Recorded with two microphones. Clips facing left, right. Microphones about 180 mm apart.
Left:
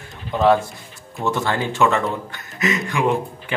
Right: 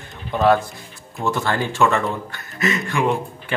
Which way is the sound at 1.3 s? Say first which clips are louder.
Even; 20° left (ahead or behind).